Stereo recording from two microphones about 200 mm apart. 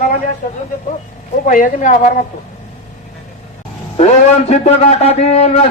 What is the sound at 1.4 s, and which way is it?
Speech, 40° left (ahead or behind).